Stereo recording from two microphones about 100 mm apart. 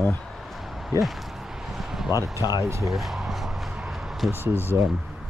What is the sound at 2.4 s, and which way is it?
Speech, 40° left (ahead or behind).